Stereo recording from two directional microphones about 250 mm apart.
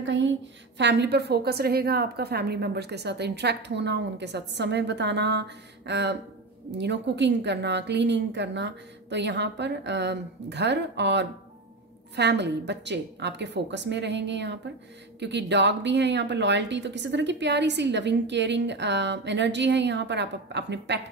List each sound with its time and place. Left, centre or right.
0.0 s speech: right